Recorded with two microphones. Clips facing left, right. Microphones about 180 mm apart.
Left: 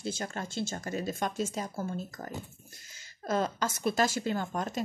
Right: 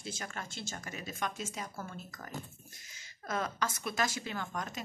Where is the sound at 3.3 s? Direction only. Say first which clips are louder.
Left 5 dB; 30° left (ahead or behind).